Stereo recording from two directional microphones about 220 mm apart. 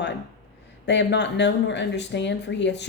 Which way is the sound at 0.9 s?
50° left (ahead or behind).